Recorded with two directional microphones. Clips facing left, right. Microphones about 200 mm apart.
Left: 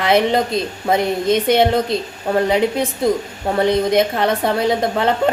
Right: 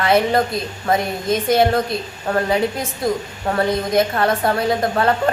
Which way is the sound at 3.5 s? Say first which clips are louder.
Left 3 dB; 20° left (ahead or behind).